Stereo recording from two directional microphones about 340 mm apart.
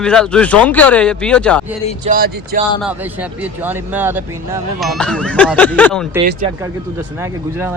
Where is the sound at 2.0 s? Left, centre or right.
Right.